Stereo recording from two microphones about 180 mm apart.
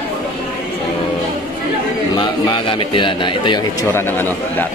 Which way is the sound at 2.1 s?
25° left (ahead or behind).